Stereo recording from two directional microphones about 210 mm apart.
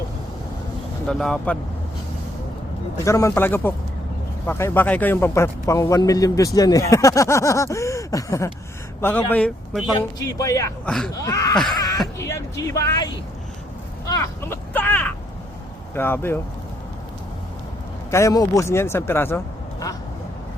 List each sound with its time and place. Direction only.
1.0 s speech: centre (ahead or behind)
3.0 s speech: 15° left (ahead or behind)
10.0 s speech: 15° left (ahead or behind)
10.8 s speech: centre (ahead or behind)
11.1 s speech: 15° left (ahead or behind)
14.1 s a sound: 10° left (ahead or behind)
16.0 s speech: 10° left (ahead or behind)
18.1 s speech: 15° left (ahead or behind)